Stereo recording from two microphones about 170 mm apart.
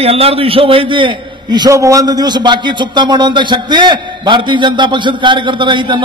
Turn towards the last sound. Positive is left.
turn(degrees=-30)  # may be behind; listen again after turning